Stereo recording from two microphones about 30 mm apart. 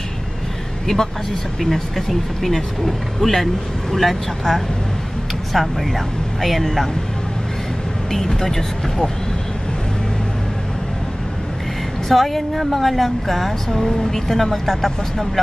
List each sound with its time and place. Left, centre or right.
0.9 s speech: centre
1.6 s speech: centre
8.1 s speech: centre
12.1 s speech: centre